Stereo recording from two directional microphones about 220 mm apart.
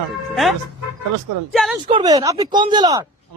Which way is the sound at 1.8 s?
20° right (ahead or behind).